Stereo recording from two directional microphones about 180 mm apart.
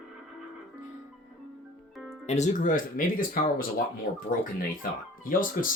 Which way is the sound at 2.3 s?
40° left (ahead or behind).